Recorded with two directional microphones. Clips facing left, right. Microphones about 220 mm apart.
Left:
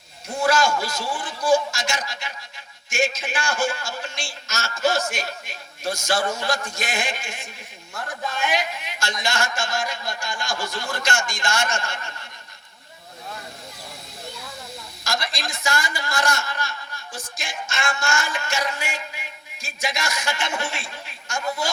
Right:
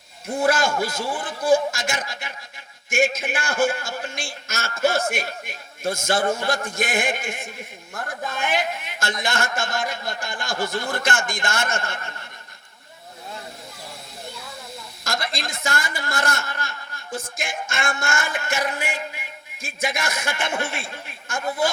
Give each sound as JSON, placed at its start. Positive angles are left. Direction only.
{"t": 0.3, "sound": "a man's voice", "side_deg": -55}
{"t": 15.0, "sound": "a man's voice", "side_deg": -55}